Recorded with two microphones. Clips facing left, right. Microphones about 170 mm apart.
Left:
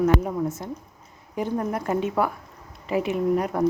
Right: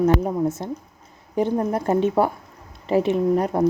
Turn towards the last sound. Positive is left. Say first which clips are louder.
# right 3 dB
turn(degrees=-30)  # may be behind; listen again after turning